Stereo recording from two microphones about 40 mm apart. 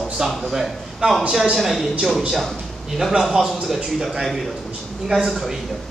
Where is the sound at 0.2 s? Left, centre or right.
Centre.